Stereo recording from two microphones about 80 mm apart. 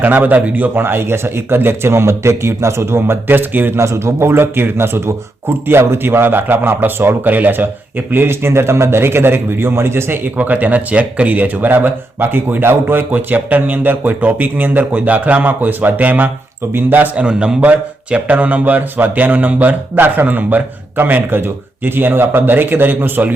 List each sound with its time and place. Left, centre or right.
0.0 s a man's voice: right
3.8 s a man's voice: right